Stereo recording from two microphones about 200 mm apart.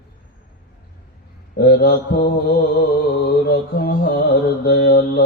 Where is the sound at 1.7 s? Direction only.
50° left (ahead or behind).